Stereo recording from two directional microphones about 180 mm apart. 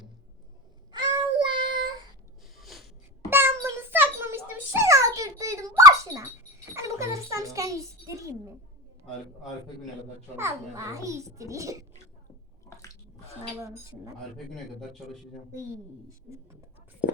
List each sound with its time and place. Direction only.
0.9 s child singing: 25° right (ahead or behind)
2.6 s a sound: centre (ahead or behind)
3.2 s a sound: 10° right (ahead or behind)
10.3 s a child's voice: 15° right (ahead or behind)
13.6 s a child's voice: 15° right (ahead or behind)
14.3 s a man's voice: centre (ahead or behind)